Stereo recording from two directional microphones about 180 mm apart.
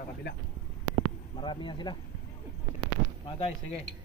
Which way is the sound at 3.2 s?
30° left (ahead or behind).